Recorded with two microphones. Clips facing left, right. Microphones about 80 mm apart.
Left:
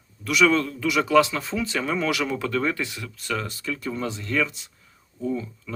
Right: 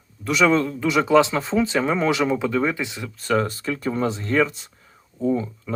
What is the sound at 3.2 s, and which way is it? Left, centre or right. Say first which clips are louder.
Speech: right 7 dB; right.